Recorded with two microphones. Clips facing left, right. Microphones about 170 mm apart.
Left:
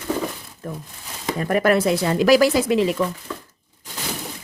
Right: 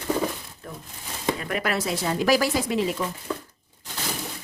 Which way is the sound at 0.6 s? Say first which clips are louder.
Left 7 dB; 45° left (ahead or behind).